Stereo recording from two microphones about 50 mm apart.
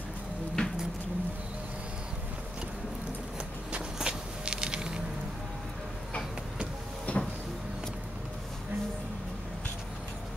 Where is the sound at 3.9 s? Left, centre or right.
Centre.